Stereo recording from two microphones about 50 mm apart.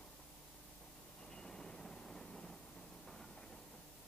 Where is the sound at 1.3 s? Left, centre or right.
Centre.